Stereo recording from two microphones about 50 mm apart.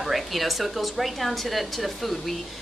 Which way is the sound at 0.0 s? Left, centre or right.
Centre.